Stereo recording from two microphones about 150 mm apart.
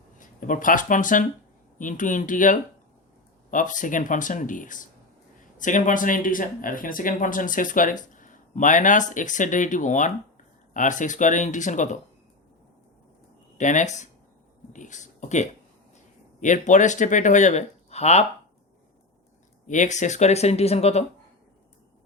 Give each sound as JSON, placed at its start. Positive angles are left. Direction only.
{"t": 0.2, "sound": "speech", "side_deg": 60}
{"t": 13.6, "sound": "speech", "side_deg": 55}
{"t": 14.7, "sound": "a sound", "side_deg": 55}
{"t": 16.4, "sound": "speech", "side_deg": 55}
{"t": 19.6, "sound": "speech", "side_deg": 55}